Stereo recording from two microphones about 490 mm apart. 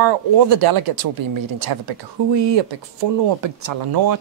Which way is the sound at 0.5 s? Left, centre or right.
Right.